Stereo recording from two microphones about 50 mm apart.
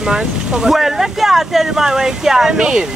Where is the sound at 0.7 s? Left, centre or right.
Centre.